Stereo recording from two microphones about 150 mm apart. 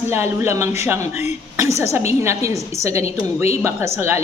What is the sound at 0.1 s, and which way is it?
A woman's voice, 15° right (ahead or behind).